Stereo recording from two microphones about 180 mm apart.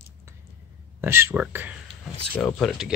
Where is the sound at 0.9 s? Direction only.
15° right (ahead or behind).